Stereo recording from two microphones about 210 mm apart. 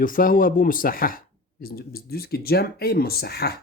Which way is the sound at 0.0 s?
40° left (ahead or behind).